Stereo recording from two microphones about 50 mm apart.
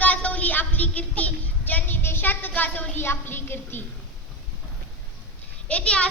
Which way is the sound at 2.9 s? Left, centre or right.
Left.